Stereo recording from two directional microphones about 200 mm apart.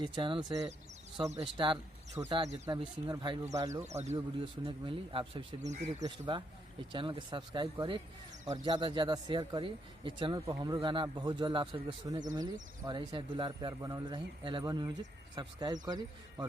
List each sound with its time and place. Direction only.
0.0 s speech: 25° right (ahead or behind)
1.2 s speech: 30° right (ahead or behind)
2.2 s speech: 10° right (ahead or behind)
2.6 s speech: 20° right (ahead or behind)
3.8 s speech: 35° right (ahead or behind)